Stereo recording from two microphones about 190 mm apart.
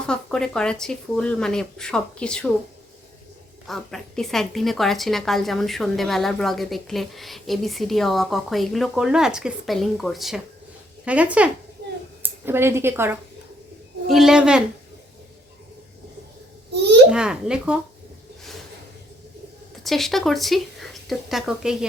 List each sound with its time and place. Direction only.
0.0 s a woman's voice: 5° left (ahead or behind)
3.7 s a woman's voice: centre (ahead or behind)
14.1 s a woman's voice: centre (ahead or behind)
16.7 s babbling: 60° right (ahead or behind)
17.1 s a woman's voice: 5° right (ahead or behind)
19.8 s speech: centre (ahead or behind)